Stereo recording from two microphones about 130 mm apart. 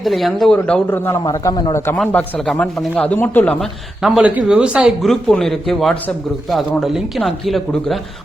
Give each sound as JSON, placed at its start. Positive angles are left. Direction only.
{"t": 0.0, "sound": "speech", "side_deg": 0}
{"t": 2.0, "sound": "a man's voice", "side_deg": 0}
{"t": 4.0, "sound": "a man's voice", "side_deg": -5}